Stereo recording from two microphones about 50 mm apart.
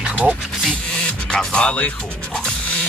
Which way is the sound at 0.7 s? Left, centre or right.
Centre.